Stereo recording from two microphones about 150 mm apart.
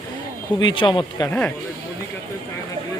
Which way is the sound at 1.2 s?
10° left (ahead or behind).